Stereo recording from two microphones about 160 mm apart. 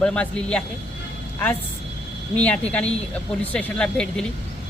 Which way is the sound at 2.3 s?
10° left (ahead or behind).